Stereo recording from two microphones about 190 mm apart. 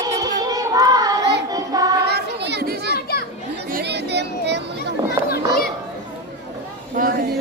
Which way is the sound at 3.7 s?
60° right (ahead or behind).